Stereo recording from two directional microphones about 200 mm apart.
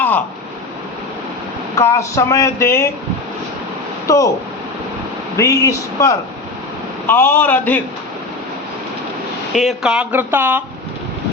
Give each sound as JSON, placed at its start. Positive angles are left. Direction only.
{"t": 1.7, "sound": "speech", "side_deg": 15}
{"t": 4.0, "sound": "speech", "side_deg": 15}
{"t": 5.4, "sound": "speech", "side_deg": 15}
{"t": 9.6, "sound": "speech", "side_deg": 0}